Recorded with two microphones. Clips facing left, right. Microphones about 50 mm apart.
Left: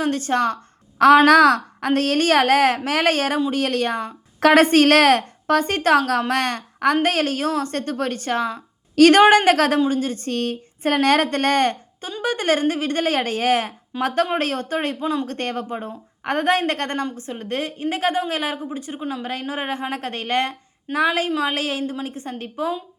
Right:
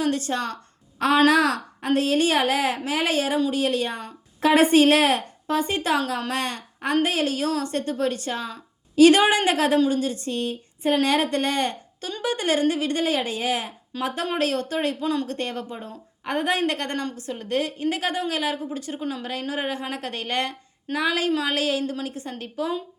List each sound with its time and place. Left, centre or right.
0.0 s a woman's voice: left
0.9 s a woman's voice: left
1.2 s a woman's voice: left
9.7 s a woman's voice: left
13.9 s speech: centre
14.3 s a woman's voice: left
15.0 s speech: centre
15.3 s a woman's voice: left